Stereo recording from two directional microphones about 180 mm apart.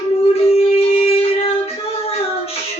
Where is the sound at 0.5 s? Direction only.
35° left (ahead or behind).